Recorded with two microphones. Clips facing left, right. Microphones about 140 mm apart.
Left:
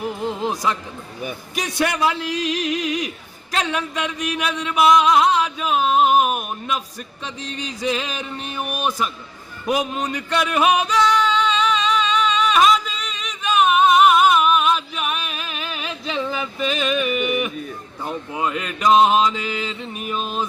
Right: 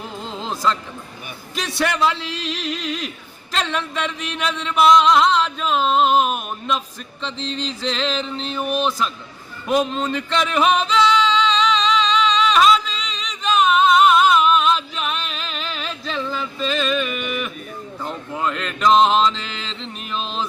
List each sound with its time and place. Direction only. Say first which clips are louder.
0.0 s speech: left 6 dB; 15° left (ahead or behind)
1.8 s music: even; 10° left (ahead or behind)
2.6 s a sound: left 4 dB; 50° left (ahead or behind)
3.6 s music: even; 10° left (ahead or behind)